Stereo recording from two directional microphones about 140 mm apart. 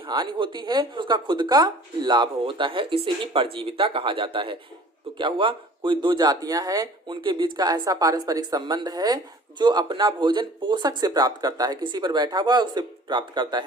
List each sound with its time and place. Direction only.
0.0 s speech: 30° right (ahead or behind)